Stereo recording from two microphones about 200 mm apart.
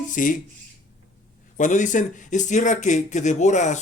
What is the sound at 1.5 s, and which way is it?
Speech, 40° left (ahead or behind).